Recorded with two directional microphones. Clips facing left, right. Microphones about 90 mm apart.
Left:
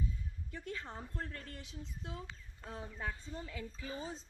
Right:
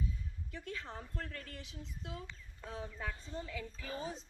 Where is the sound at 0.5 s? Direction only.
25° left (ahead or behind).